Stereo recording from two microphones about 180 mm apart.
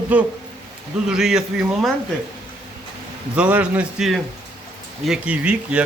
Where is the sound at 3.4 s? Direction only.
5° right (ahead or behind).